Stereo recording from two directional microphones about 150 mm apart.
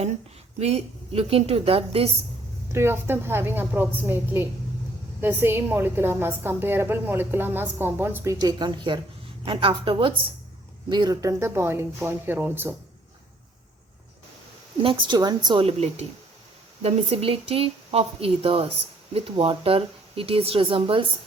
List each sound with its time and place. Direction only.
0.6 s speech: 45° right (ahead or behind)
2.7 s a woman's voice: 15° right (ahead or behind)
14.8 s speech: 35° right (ahead or behind)
15.6 s speech: 45° right (ahead or behind)